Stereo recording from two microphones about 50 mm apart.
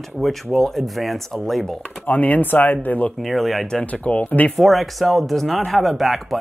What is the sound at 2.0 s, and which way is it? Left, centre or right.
Speech, left.